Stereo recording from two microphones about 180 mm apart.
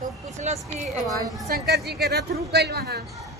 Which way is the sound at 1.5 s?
65° right (ahead or behind).